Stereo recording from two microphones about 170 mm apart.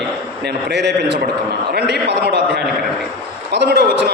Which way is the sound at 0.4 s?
80° right.